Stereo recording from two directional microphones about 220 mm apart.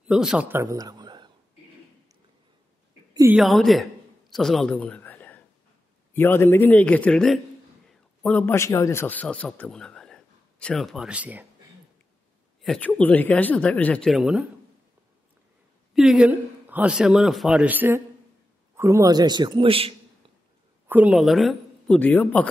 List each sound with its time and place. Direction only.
0.1 s a man's voice: centre (ahead or behind); by 1.3 s 20° right (ahead or behind)
3.2 s a man's voice: 5° right (ahead or behind)
12.6 s a man's voice: 5° left (ahead or behind)
15.9 s a man's voice: centre (ahead or behind); by 19.9 s 25° right (ahead or behind)
20.8 s speech: 5° right (ahead or behind)